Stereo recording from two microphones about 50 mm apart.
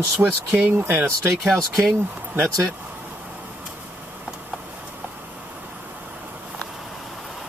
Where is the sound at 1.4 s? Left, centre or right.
Centre.